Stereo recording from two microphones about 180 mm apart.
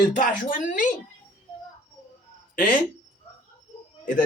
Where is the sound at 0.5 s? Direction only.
45° left (ahead or behind).